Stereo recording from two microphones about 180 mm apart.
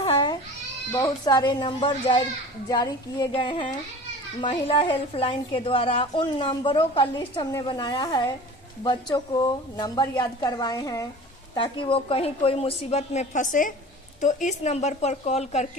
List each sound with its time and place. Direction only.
0.0 s goat: 30° left (ahead or behind)
0.9 s a woman's voice: 20° left (ahead or behind); by 15.8 s 40° left (ahead or behind)